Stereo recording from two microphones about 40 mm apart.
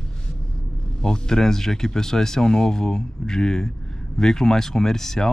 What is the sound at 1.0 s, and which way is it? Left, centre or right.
Speech, centre.